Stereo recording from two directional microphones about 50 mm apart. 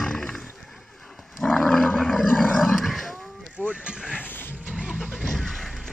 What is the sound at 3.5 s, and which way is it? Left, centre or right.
Music, right.